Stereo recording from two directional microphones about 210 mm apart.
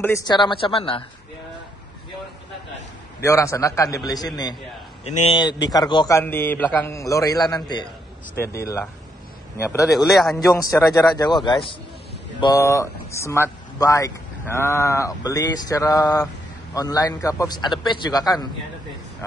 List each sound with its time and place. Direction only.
0.0 s a man's voice: 15° left (ahead or behind)
3.2 s speech: 15° left (ahead or behind)
5.0 s a man's voice: 30° left (ahead or behind)
9.6 s speech: 10° left (ahead or behind)
9.8 s speech: centre (ahead or behind)
10.6 s speech: 15° left (ahead or behind)
12.4 s speech: 15° left (ahead or behind)